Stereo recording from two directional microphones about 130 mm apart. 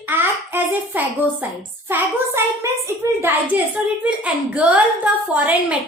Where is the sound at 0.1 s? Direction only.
15° right (ahead or behind).